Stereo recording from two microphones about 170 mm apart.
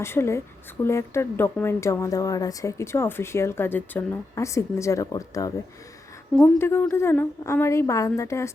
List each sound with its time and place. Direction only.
0.0 s speech: 15° left (ahead or behind)
6.6 s speech: 15° left (ahead or behind)